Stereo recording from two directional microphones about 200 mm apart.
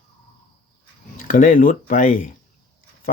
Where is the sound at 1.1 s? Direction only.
40° left (ahead or behind).